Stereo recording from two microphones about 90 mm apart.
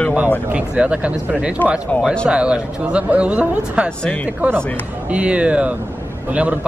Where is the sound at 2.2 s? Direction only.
10° right (ahead or behind).